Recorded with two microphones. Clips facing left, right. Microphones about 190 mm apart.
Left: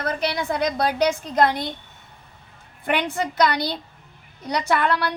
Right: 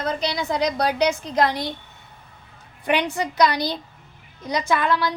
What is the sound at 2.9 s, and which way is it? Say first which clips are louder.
A woman's voice: right 1 dB; 55° left (ahead or behind).